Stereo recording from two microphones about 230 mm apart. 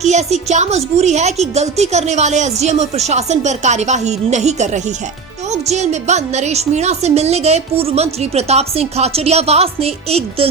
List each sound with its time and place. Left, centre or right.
0.1 s speech: right